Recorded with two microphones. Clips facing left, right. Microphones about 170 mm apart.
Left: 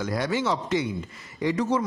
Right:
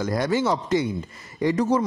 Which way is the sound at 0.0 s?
45° right (ahead or behind).